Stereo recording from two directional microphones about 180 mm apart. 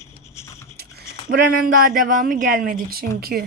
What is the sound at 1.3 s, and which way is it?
A woman's voice, 55° right (ahead or behind).